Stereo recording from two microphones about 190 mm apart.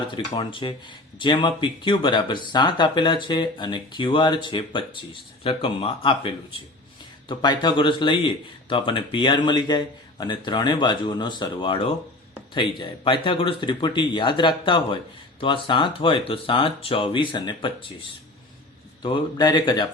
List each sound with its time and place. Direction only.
0.1 s speech: 25° left (ahead or behind)
19.0 s speech: 20° left (ahead or behind)